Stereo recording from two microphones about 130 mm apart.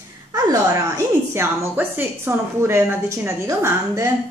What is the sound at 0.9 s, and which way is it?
A woman's voice, 20° right (ahead or behind).